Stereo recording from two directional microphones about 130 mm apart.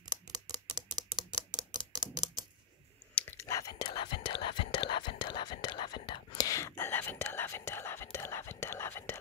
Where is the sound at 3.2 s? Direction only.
15° left (ahead or behind).